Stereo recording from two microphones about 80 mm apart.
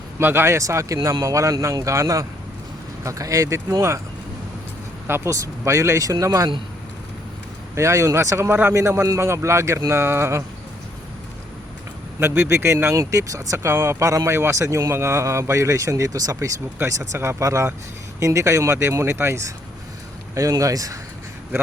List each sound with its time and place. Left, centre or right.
0.2 s speech: right
5.0 s speech: right
7.8 s speech: right
12.2 s speech: right